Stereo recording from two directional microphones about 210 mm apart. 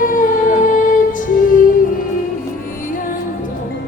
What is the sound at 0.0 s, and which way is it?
Music, 40° left (ahead or behind).